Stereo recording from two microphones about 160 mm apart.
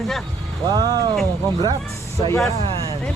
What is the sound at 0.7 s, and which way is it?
Speech, 25° right (ahead or behind).